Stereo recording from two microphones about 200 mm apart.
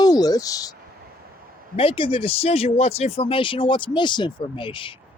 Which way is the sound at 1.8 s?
25° left (ahead or behind).